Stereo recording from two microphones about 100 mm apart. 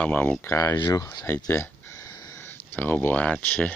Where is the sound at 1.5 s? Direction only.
30° left (ahead or behind).